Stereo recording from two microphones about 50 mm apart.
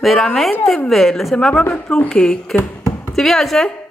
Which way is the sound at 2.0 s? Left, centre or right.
Centre.